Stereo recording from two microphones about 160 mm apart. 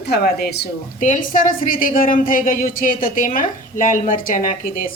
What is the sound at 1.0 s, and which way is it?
A woman's voice, 55° left (ahead or behind).